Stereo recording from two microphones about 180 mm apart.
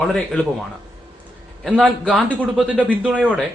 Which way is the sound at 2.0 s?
10° right (ahead or behind).